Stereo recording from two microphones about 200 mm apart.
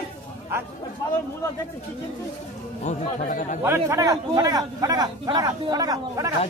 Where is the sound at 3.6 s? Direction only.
15° right (ahead or behind).